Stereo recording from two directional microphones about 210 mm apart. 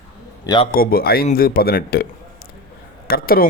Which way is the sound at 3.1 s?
45° left (ahead or behind).